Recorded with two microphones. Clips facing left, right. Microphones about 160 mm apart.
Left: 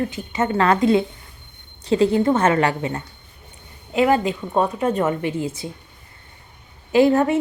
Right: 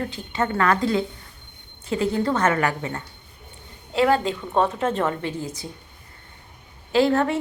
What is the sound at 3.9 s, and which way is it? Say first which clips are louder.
A woman's voice: left 2 dB; 10° left (ahead or behind).